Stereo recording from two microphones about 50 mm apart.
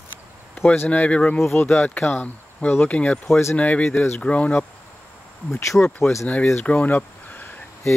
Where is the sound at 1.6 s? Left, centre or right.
Left.